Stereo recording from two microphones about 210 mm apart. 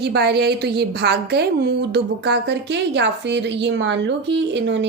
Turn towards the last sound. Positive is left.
turn(degrees=-55)  # may be behind; listen again after turning